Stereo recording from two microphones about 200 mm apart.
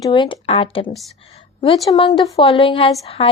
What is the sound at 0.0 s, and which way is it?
A woman's voice, 25° left (ahead or behind).